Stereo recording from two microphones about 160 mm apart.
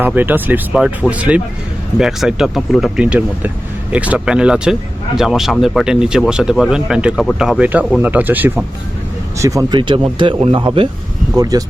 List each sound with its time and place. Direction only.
0.0 s speech: 10° right (ahead or behind)